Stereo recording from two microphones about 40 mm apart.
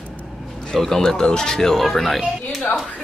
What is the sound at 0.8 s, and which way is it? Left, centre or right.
Speech, centre.